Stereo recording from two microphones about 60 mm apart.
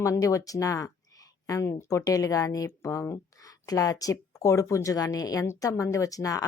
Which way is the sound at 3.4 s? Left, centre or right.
Left.